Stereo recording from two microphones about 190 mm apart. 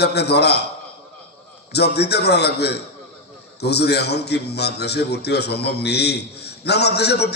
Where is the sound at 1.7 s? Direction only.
60° left (ahead or behind).